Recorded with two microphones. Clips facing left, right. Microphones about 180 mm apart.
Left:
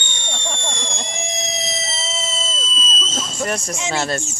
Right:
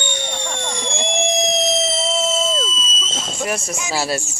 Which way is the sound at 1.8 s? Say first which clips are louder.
Right 8 dB; 60° right (ahead or behind).